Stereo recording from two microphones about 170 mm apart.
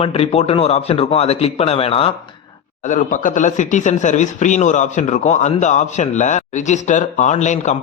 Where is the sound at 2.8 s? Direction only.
50° left (ahead or behind).